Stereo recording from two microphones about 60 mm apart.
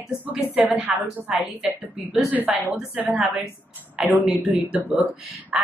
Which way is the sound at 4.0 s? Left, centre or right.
Centre.